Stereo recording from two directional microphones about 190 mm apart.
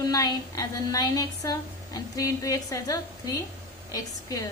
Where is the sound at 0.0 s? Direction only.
20° left (ahead or behind).